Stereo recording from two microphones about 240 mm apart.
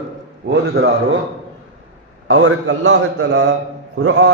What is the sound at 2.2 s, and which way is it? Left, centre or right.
A man's voice, right.